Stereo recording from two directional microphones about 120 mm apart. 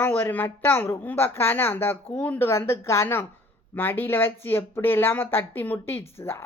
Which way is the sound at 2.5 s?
25° left (ahead or behind).